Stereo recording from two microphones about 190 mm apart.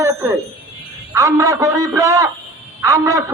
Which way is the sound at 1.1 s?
15° right (ahead or behind).